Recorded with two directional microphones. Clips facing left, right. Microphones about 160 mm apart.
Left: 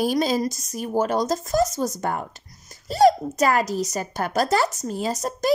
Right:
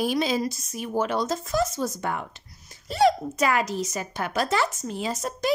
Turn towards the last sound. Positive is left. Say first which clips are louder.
# left 3 dB
turn(degrees=40)  # may be behind; listen again after turning